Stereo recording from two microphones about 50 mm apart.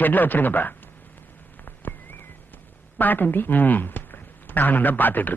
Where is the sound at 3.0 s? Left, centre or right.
Left.